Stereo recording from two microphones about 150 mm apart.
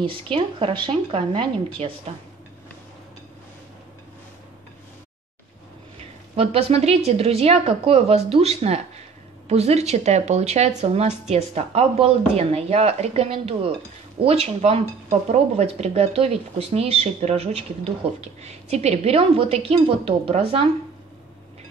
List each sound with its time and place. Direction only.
0.3 s a woman's voice: 35° right (ahead or behind)
6.3 s speech: 40° right (ahead or behind)